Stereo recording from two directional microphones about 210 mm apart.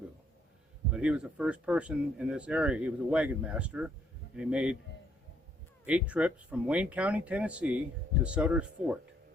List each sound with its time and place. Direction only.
0.9 s speech: 5° right (ahead or behind)
5.8 s speech: 5° right (ahead or behind)